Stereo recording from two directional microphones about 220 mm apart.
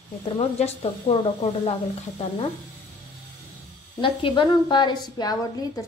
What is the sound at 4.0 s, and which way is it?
A woman's voice, 20° left (ahead or behind).